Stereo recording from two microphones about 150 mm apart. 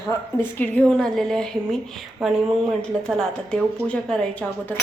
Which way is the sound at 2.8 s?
5° left (ahead or behind).